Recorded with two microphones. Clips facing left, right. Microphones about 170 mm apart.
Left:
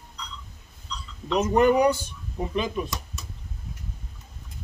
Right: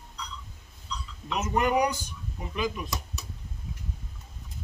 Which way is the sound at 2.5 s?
30° left (ahead or behind).